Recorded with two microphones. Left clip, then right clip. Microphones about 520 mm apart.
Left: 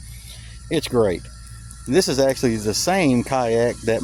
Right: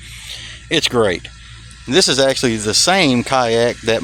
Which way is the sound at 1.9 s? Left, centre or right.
Left.